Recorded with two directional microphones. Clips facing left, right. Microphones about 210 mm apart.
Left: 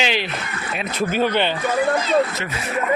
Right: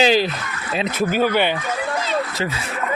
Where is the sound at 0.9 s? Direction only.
5° right (ahead or behind).